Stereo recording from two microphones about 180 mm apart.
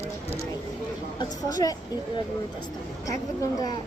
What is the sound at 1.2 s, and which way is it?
Speech, 20° left (ahead or behind).